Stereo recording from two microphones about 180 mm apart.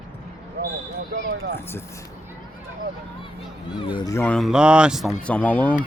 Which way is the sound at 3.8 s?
25° left (ahead or behind).